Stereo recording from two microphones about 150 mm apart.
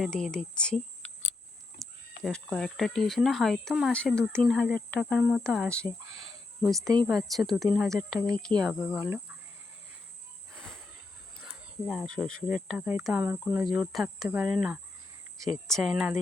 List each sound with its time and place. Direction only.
0.0 s speech: 5° left (ahead or behind)
1.8 s speech: 5° left (ahead or behind)
6.8 s a woman's voice: 25° right (ahead or behind)
7.1 s speech: centre (ahead or behind)
8.8 s speech: 10° right (ahead or behind)
10.5 s cricket: 5° left (ahead or behind)
11.9 s speech: 5° left (ahead or behind)
12.9 s speech: 15° right (ahead or behind)
13.7 s speech: centre (ahead or behind)